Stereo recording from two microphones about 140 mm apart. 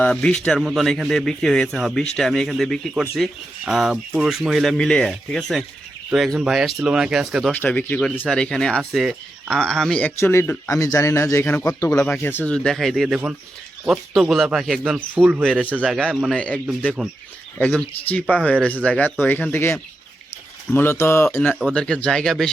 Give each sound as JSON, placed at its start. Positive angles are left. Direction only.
{"t": 0.0, "sound": "speech", "side_deg": 5}
{"t": 7.5, "sound": "speech", "side_deg": 10}
{"t": 10.2, "sound": "speech", "side_deg": 15}
{"t": 10.7, "sound": "a man's voice", "side_deg": 25}
{"t": 17.0, "sound": "speech", "side_deg": 0}